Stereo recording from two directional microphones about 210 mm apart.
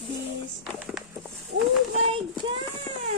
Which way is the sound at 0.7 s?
Centre (ahead or behind).